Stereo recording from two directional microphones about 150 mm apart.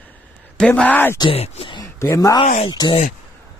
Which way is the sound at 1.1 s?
40° left (ahead or behind).